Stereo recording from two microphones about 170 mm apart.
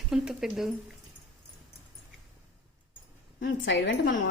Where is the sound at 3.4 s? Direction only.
90° left.